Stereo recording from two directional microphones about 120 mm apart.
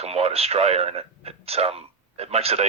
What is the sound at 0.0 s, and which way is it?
Speech, 55° right (ahead or behind).